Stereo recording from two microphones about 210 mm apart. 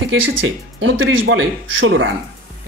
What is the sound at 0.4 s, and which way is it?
Speech, 65° right (ahead or behind).